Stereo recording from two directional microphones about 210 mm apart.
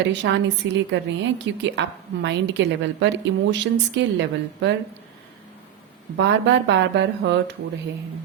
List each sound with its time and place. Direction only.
0.1 s a woman's voice: 60° right (ahead or behind)
6.1 s a woman's voice: 60° right (ahead or behind)